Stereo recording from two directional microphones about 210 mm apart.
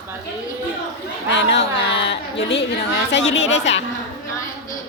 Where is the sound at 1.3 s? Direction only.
60° left (ahead or behind).